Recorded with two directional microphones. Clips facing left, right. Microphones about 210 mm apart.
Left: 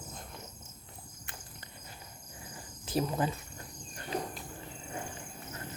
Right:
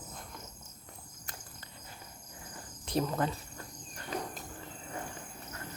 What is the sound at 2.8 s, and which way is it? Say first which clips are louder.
Speech: even; 5° left (ahead or behind).